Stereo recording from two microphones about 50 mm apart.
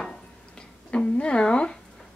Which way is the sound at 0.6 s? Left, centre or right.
Left.